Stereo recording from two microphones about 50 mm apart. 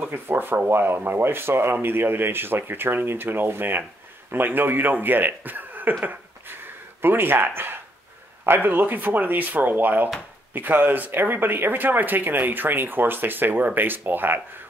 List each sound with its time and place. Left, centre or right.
0.0 s speech: right